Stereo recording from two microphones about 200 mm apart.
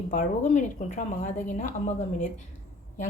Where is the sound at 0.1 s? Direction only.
40° left (ahead or behind).